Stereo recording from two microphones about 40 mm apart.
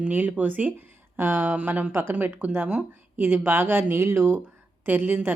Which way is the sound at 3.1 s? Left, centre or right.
Right.